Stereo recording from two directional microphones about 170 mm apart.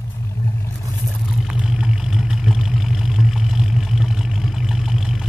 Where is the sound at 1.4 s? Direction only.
5° right (ahead or behind).